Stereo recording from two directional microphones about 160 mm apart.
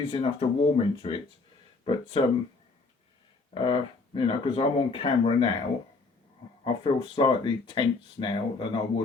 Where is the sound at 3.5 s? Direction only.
30° left (ahead or behind).